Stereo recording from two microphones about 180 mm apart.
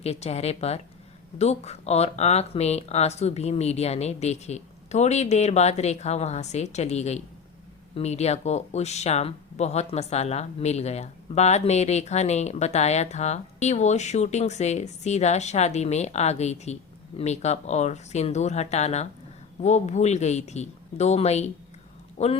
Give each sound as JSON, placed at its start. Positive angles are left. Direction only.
{"t": 0.0, "sound": "speech", "side_deg": 35}